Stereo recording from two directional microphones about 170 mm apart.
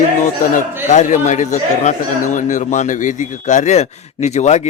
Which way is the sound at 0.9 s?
45° left (ahead or behind).